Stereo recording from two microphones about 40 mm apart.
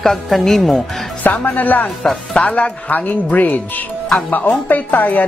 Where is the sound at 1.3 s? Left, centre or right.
Left.